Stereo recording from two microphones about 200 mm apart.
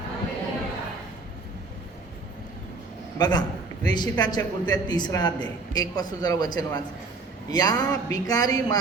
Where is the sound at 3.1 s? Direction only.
20° left (ahead or behind).